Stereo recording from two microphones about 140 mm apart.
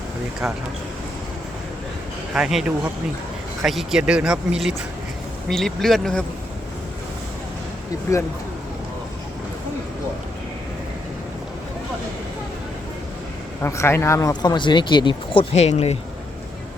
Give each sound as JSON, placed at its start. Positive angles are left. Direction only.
{"t": 0.4, "sound": "speech", "side_deg": -5}
{"t": 2.3, "sound": "speech", "side_deg": -5}
{"t": 13.6, "sound": "speech", "side_deg": 20}